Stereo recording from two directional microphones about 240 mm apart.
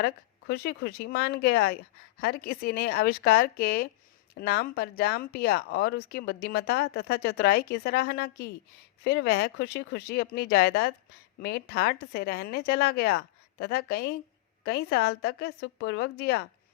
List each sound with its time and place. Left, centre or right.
0.0 s speech: left